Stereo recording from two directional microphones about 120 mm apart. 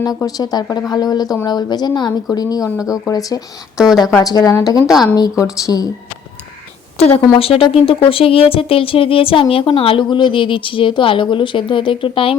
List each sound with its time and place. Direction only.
0.2 s a woman's voice: 30° left (ahead or behind)
2.7 s speech: 5° right (ahead or behind)
3.1 s a woman's voice: 30° left (ahead or behind)
3.8 s speech: 5° right (ahead or behind)
4.2 s a woman's voice: 30° left (ahead or behind)
7.0 s a woman's voice: 55° left (ahead or behind)